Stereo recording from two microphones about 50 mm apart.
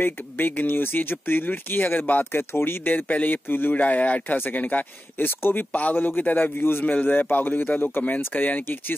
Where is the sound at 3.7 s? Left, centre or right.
Left.